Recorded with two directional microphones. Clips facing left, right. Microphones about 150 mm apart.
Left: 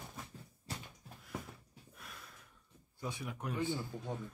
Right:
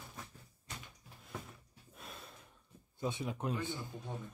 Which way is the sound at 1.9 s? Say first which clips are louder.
Right 4 dB; 25° right (ahead or behind).